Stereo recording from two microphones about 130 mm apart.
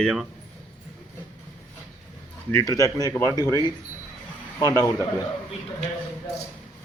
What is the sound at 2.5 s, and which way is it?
Speech, 25° left (ahead or behind).